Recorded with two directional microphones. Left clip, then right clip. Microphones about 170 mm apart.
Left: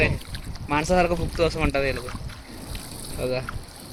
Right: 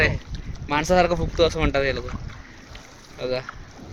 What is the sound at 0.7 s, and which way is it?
Speech, 30° right (ahead or behind).